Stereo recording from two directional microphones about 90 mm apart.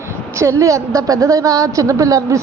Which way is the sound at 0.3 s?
35° right (ahead or behind).